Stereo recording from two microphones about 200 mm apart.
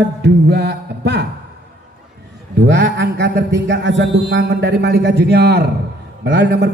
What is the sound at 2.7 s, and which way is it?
Speech, 60° right (ahead or behind).